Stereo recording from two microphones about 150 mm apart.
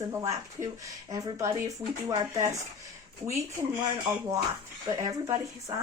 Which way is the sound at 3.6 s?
25° right (ahead or behind).